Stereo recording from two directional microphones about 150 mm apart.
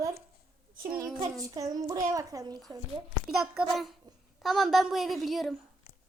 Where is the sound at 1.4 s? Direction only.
25° right (ahead or behind).